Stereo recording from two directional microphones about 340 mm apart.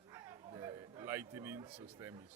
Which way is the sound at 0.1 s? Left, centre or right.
Centre.